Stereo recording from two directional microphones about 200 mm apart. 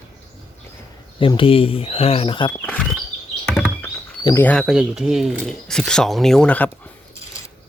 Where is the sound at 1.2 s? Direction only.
25° left (ahead or behind).